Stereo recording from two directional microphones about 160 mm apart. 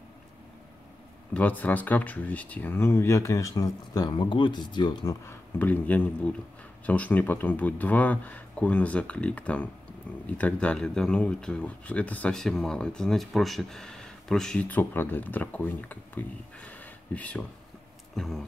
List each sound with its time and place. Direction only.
1.3 s speech: 10° left (ahead or behind); by 5.1 s 30° left (ahead or behind)
5.2 s speech: 15° left (ahead or behind)